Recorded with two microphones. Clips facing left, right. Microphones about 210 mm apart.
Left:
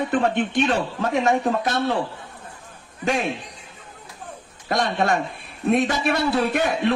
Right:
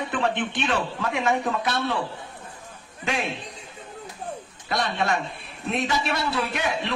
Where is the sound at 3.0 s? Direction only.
40° left (ahead or behind).